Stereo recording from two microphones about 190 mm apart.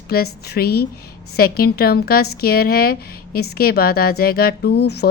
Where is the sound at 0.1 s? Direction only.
55° left (ahead or behind).